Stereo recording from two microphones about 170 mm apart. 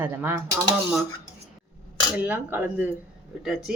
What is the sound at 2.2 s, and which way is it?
Speech, 10° right (ahead or behind).